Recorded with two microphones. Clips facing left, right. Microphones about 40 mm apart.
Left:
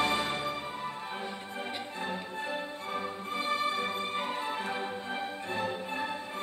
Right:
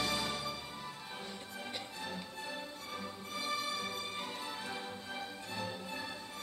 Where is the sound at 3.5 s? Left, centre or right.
Left.